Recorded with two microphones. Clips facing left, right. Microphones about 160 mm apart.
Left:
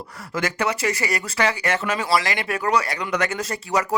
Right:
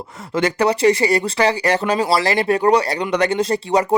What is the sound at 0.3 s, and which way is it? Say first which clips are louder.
Speech: right 7 dB; 30° right (ahead or behind).